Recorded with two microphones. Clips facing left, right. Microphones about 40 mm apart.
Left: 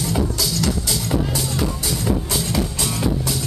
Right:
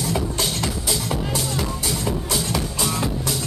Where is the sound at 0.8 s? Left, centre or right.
Centre.